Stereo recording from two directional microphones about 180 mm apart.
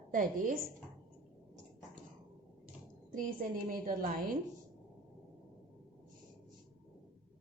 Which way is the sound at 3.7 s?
50° right (ahead or behind).